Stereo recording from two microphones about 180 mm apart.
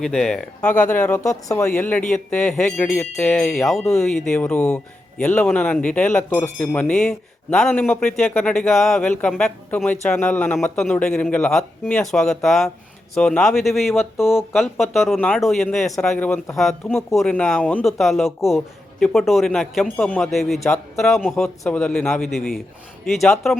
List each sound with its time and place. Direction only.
0.0 s speech: centre (ahead or behind)
0.7 s speech: 45° left (ahead or behind)
1.0 s speech: 15° left (ahead or behind)